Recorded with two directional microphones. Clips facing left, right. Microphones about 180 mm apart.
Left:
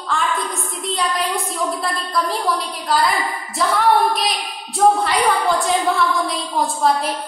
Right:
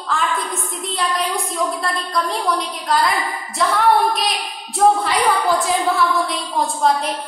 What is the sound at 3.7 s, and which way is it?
A woman's voice, centre (ahead or behind).